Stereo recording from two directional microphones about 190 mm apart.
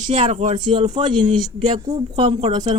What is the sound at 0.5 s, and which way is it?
A man's voice, 25° right (ahead or behind).